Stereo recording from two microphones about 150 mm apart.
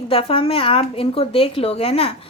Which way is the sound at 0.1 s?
40° left (ahead or behind).